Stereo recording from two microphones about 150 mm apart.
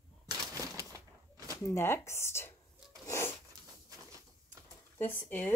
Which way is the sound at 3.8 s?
25° right (ahead or behind).